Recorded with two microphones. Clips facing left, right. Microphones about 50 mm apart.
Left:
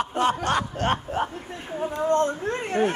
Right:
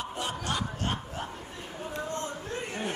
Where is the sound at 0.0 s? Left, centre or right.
Left.